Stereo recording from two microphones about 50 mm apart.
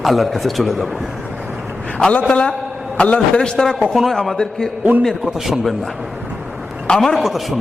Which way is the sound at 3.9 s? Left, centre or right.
Centre.